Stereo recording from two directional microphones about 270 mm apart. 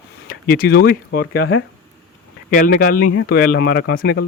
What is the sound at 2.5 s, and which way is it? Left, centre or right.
Speech, left.